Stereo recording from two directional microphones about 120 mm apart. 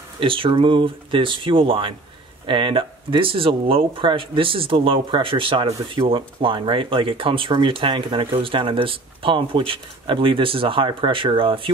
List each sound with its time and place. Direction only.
0.2 s speech: 45° right (ahead or behind)